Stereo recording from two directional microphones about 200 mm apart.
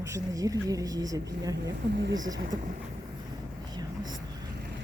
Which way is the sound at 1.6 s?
60° right (ahead or behind).